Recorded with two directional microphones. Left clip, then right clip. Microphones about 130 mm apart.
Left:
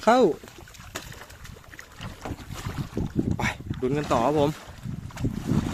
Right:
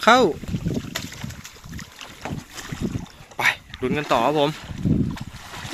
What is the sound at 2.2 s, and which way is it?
Boat, 50° left (ahead or behind).